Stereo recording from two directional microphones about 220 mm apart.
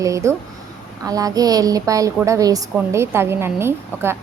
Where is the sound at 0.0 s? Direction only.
15° right (ahead or behind).